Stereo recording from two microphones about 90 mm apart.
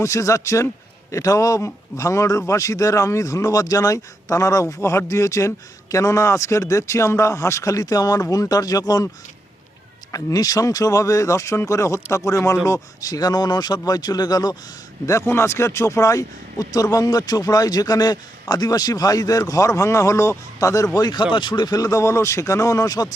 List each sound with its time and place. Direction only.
0.0 s speech: 35° left (ahead or behind)
10.1 s speech: 40° left (ahead or behind)
15.0 s speech: 30° left (ahead or behind)